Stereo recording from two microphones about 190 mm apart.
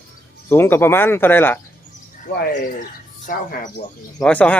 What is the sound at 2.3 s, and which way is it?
Speech, 55° left (ahead or behind).